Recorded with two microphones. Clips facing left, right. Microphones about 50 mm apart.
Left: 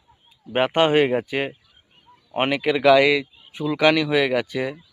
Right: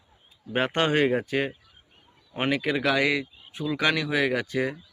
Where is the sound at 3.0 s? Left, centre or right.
Left.